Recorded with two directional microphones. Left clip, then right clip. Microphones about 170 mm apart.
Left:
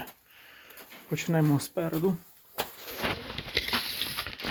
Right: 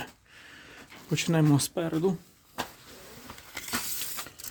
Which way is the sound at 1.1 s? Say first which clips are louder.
Right 2 dB; 35° right (ahead or behind).